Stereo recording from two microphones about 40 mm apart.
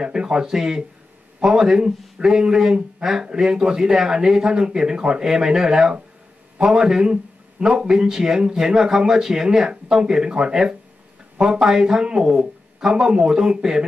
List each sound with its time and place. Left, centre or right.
0.0 s speech: centre